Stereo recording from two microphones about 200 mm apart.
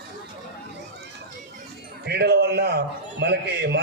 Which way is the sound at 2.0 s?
55° right (ahead or behind).